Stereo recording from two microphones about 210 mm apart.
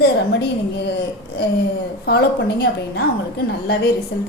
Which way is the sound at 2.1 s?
50° left (ahead or behind).